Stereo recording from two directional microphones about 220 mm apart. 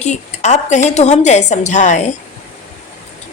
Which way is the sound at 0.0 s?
30° left (ahead or behind).